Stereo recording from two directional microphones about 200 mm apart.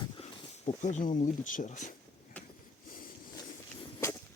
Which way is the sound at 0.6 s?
35° left (ahead or behind).